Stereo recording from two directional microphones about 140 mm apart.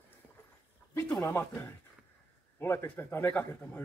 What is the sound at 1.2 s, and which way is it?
A man's voice, 15° left (ahead or behind).